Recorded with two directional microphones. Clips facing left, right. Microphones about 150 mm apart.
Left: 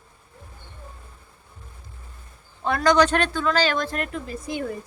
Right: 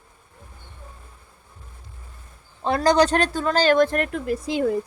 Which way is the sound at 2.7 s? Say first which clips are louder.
Right 1 dB; 35° right (ahead or behind).